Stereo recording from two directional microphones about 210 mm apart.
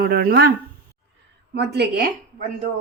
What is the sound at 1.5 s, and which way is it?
Speech, 50° right (ahead or behind).